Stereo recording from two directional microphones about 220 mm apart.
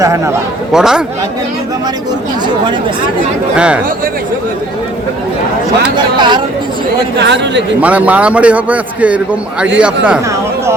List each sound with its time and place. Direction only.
0.0 s a man's voice: 15° right (ahead or behind)
0.7 s a man's voice: 5° right (ahead or behind)
3.5 s a man's voice: 5° right (ahead or behind)
6.0 s speech: 20° right (ahead or behind)
7.2 s speech: 50° right (ahead or behind)
7.8 s a man's voice: 5° right (ahead or behind)